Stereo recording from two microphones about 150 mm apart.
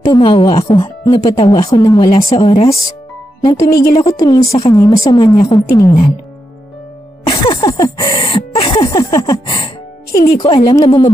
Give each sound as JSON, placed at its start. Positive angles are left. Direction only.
{"t": 0.0, "sound": "speech", "side_deg": 30}
{"t": 3.4, "sound": "speech", "side_deg": 25}
{"t": 4.5, "sound": "speech", "side_deg": 40}
{"t": 4.7, "sound": "speech", "side_deg": 25}
{"t": 7.2, "sound": "speech", "side_deg": 35}
{"t": 8.2, "sound": "throat clearing", "side_deg": 35}
{"t": 8.9, "sound": "a sound", "side_deg": 20}
{"t": 10.4, "sound": "speech", "side_deg": 30}